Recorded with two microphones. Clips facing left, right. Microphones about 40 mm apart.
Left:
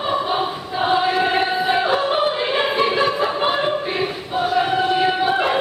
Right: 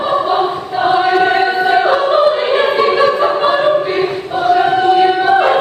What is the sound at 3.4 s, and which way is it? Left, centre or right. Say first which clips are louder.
Choir: right 8 dB; centre.